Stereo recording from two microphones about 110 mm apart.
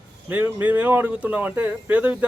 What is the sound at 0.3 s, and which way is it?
Speech, 15° right (ahead or behind).